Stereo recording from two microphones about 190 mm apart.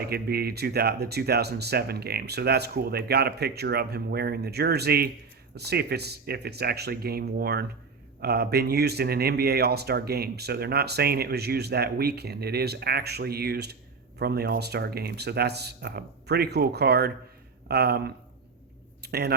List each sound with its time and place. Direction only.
0.0 s speech: 55° right (ahead or behind)